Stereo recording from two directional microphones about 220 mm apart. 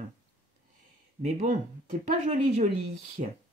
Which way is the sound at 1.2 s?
35° right (ahead or behind).